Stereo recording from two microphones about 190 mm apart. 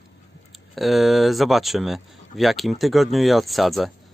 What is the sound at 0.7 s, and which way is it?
Speech, centre (ahead or behind).